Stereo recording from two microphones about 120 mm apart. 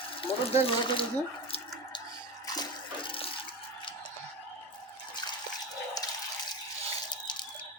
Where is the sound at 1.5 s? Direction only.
55° left (ahead or behind).